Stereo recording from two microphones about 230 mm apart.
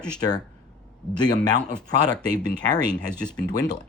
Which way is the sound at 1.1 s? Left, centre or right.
Centre.